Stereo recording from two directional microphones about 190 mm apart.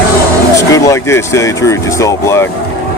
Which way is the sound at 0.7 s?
15° left (ahead or behind).